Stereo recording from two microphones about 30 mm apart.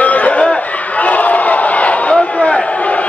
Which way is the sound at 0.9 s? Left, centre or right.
Left.